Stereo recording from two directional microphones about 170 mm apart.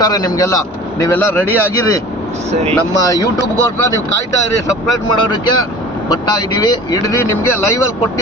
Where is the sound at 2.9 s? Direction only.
20° left (ahead or behind).